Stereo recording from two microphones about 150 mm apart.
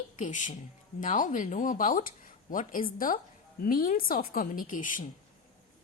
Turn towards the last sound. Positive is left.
turn(degrees=60)  # may be behind; listen again after turning